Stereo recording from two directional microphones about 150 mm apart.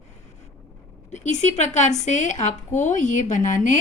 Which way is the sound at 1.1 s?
50° left (ahead or behind).